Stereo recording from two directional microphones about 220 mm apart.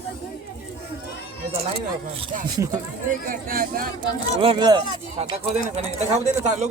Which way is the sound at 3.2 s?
40° right (ahead or behind).